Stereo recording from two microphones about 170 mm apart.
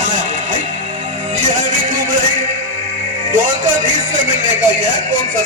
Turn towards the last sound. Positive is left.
turn(degrees=-45)  # may be behind; listen again after turning